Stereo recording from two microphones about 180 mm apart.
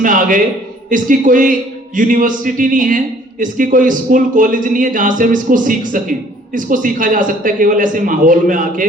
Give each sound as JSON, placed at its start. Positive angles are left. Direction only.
{"t": 0.0, "sound": "a man's voice", "side_deg": -45}